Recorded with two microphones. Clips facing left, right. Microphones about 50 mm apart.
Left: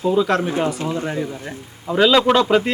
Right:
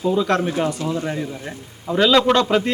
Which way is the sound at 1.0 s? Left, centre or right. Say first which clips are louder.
Left 1 dB; centre.